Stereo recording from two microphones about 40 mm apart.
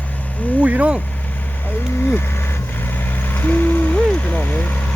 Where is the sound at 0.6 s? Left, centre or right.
Right.